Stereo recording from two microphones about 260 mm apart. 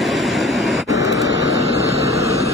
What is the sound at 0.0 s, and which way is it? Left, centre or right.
Vehicle, centre.